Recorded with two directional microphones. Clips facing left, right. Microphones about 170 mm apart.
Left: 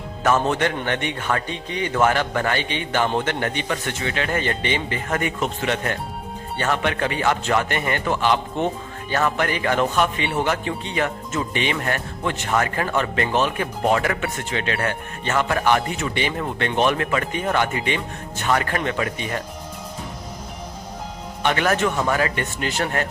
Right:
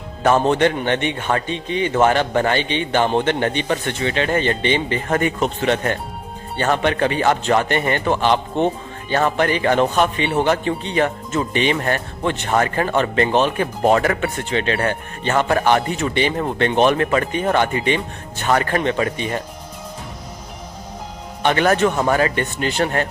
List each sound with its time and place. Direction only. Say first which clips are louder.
0.2 s a man's voice: right 4 dB; 30° right (ahead or behind)
21.4 s a man's voice: right 4 dB; 35° right (ahead or behind)